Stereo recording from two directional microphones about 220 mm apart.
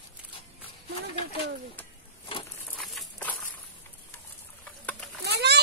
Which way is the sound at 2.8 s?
Centre (ahead or behind).